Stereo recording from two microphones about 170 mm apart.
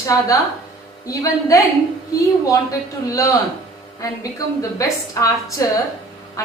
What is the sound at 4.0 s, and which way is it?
A woman's voice, 20° left (ahead or behind).